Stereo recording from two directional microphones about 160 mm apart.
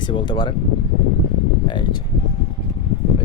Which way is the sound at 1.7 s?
30° left (ahead or behind).